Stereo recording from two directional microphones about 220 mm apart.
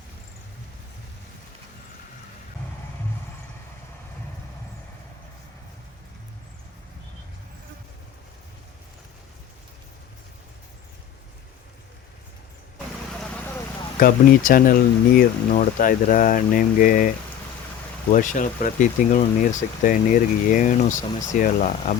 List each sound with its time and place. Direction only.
14.0 s speech: 40° left (ahead or behind)
18.1 s speech: 35° left (ahead or behind)